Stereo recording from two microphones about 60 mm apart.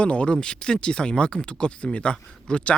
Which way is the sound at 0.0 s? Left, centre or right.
Centre.